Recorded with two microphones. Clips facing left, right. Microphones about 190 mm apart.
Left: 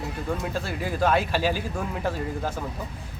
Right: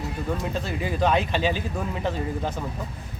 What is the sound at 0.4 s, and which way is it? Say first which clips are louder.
Speech: right 1 dB; 5° left (ahead or behind).